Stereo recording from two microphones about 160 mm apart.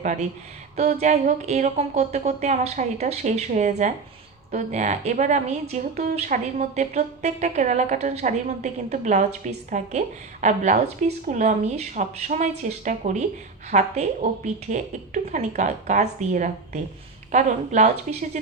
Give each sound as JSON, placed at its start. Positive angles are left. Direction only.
{"t": 0.0, "sound": "a woman's voice", "side_deg": -50}